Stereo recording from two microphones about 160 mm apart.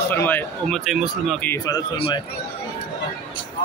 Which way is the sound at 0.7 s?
5° right (ahead or behind).